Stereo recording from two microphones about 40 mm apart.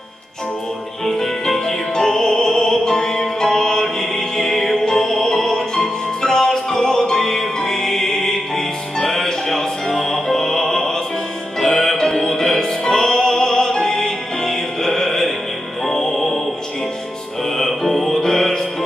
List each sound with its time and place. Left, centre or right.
1.0 s music: centre
17.6 s music: centre